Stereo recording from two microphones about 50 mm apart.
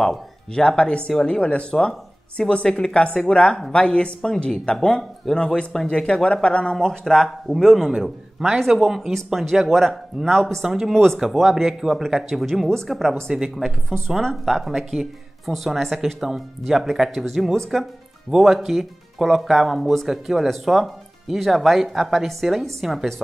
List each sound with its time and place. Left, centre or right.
0.0 s speech: centre